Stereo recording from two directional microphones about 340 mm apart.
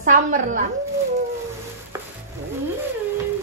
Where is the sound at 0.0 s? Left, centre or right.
Right.